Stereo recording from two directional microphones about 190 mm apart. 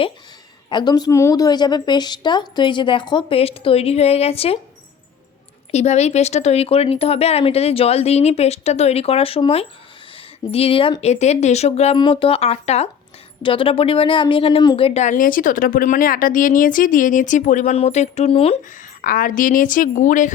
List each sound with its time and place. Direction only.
0.7 s a woman's voice: 25° left (ahead or behind)
5.7 s speech: 35° left (ahead or behind)
18.7 s a woman's voice: 45° left (ahead or behind)